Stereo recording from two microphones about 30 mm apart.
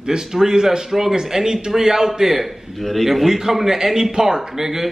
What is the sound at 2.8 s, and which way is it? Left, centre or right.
Speech, centre.